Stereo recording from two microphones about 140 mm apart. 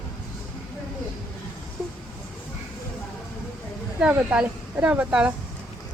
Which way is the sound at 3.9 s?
10° right (ahead or behind).